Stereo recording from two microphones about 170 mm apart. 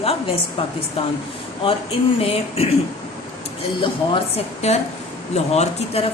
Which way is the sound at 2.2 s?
35° left (ahead or behind).